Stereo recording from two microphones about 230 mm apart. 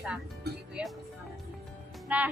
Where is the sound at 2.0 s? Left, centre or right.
Centre.